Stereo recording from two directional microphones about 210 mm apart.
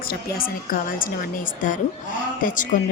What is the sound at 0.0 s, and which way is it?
A woman's voice, 45° left (ahead or behind).